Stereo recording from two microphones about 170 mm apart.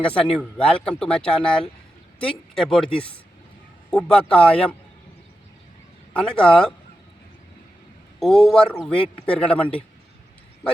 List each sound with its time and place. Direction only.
0.2 s a man's voice: 5° left (ahead or behind)
6.1 s a man's voice: 5° left (ahead or behind)
8.2 s a man's voice: centre (ahead or behind)